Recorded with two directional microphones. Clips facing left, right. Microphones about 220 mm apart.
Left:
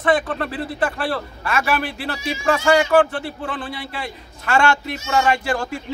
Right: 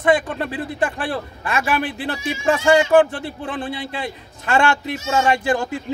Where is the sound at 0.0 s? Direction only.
15° right (ahead or behind).